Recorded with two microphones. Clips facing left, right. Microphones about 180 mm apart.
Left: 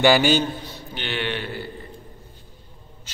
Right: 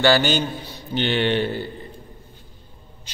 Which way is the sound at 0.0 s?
10° left (ahead or behind).